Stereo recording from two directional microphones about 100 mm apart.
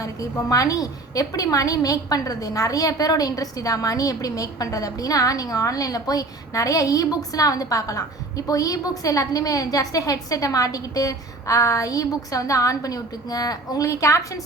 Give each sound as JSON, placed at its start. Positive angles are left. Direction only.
{"t": 0.0, "sound": "a woman's voice", "side_deg": 35}